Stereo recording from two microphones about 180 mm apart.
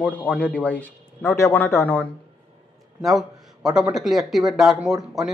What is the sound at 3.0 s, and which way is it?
A man's voice, 5° right (ahead or behind).